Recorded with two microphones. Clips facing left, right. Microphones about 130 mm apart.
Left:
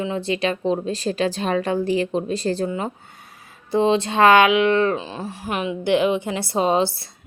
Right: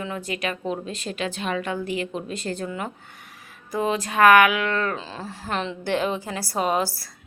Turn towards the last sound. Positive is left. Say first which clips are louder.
# left 4 dB
turn(degrees=25)  # may be behind; listen again after turning